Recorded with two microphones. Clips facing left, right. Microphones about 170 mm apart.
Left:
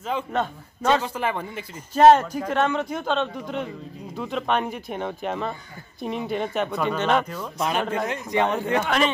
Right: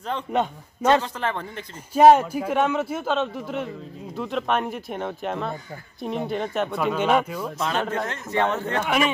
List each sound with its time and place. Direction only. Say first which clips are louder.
0.3 s a man's voice: right 2 dB; 15° right (ahead or behind)
1.0 s speech: left 1 dB; 10° left (ahead or behind)
2.0 s speech: even; 10° right (ahead or behind)
7.9 s speech: left 2 dB; 10° left (ahead or behind)
8.8 s a man's voice: right 4 dB; 5° right (ahead or behind)